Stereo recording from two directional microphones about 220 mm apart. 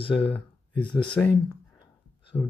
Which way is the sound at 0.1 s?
5° left (ahead or behind).